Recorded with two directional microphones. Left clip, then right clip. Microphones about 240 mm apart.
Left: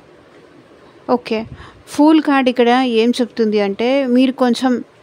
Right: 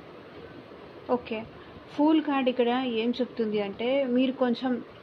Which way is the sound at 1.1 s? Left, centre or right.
Left.